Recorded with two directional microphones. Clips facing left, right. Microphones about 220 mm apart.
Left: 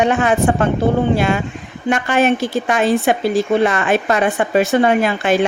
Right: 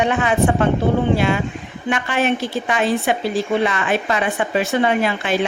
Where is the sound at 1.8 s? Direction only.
45° left (ahead or behind).